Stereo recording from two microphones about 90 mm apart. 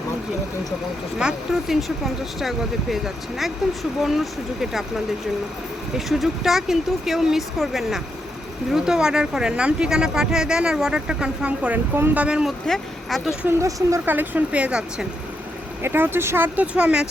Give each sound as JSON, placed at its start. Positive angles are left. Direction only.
{"t": 1.2, "sound": "speech", "side_deg": -5}
{"t": 6.1, "sound": "speech", "side_deg": 0}
{"t": 12.6, "sound": "speech", "side_deg": 5}
{"t": 13.6, "sound": "speech", "side_deg": -35}
{"t": 14.0, "sound": "speech", "side_deg": -20}
{"t": 15.8, "sound": "speech", "side_deg": -25}
{"t": 16.6, "sound": "speech", "side_deg": -10}